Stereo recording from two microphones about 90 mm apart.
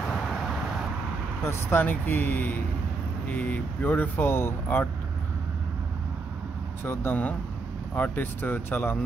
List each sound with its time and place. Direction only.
1.4 s speech: 25° left (ahead or behind)
6.8 s speech: 25° left (ahead or behind)